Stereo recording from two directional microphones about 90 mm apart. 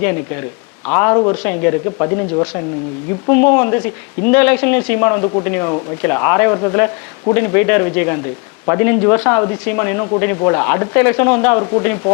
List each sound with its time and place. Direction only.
0.0 s speech: 20° left (ahead or behind)